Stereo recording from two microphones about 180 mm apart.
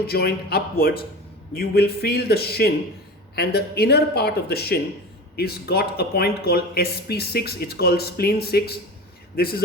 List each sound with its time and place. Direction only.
0.1 s speech: 60° left (ahead or behind)